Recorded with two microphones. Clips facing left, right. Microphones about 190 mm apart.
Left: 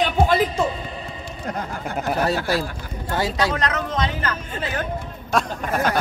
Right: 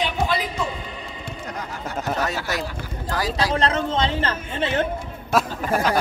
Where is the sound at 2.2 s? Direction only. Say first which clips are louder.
Left 4 dB; 30° left (ahead or behind).